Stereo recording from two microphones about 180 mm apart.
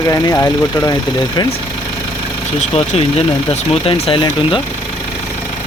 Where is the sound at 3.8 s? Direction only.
30° left (ahead or behind).